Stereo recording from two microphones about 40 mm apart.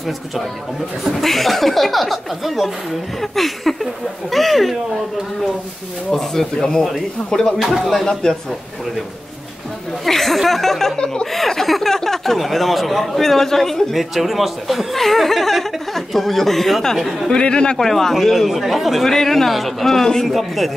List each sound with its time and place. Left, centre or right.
1.2 s speech: centre
6.1 s speech: centre
7.5 s speech: centre
8.0 s speech: centre
10.0 s speech: centre
13.9 s speech: centre
17.3 s speech: left
17.7 s speech: centre